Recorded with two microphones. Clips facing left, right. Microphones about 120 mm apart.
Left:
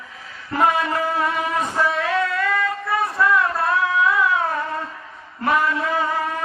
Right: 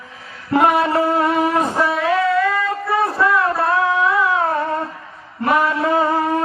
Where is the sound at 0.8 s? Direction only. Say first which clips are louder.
Right 5 dB; 30° right (ahead or behind).